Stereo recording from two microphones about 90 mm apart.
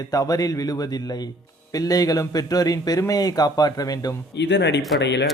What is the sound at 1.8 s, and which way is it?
Speech, 45° left (ahead or behind).